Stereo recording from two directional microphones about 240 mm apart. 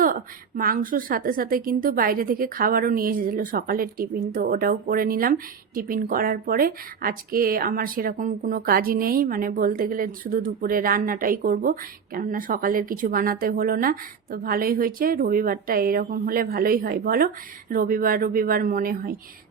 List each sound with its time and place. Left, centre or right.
0.0 s a woman's voice: right